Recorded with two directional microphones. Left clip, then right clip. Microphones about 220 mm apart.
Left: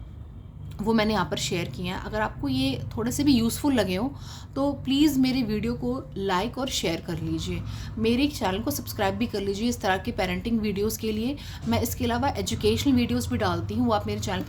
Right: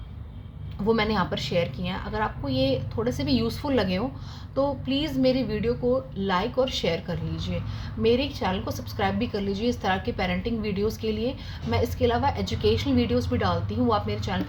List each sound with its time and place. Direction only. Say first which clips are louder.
0.9 s a woman's voice: right 1 dB; 55° left (ahead or behind)